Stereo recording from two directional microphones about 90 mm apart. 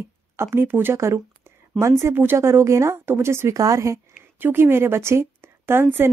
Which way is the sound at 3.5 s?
40° right (ahead or behind).